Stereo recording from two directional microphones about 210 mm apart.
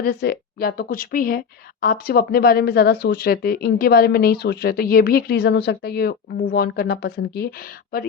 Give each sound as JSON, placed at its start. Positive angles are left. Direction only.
{"t": 0.0, "sound": "speech", "side_deg": 45}